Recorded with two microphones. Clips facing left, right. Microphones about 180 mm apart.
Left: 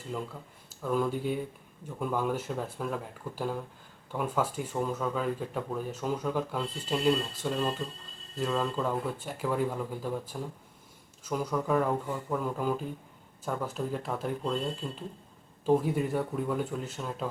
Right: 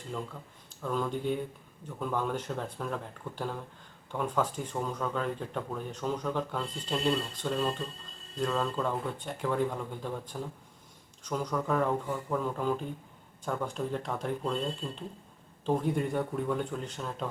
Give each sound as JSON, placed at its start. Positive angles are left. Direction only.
{"t": 0.7, "sound": "speech", "side_deg": 5}